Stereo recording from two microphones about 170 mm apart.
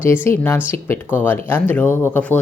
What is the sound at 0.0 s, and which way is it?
Speech, 15° left (ahead or behind).